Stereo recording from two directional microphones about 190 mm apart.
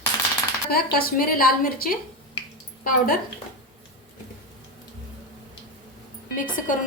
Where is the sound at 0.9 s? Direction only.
50° left (ahead or behind).